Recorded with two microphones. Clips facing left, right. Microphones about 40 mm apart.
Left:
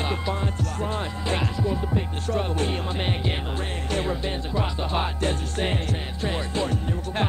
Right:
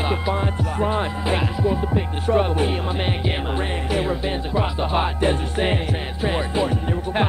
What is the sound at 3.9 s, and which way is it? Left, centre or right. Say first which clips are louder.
Music: right 3 dB; centre.